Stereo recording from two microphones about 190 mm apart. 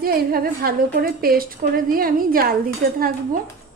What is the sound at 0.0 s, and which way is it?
A woman's voice, 50° right (ahead or behind).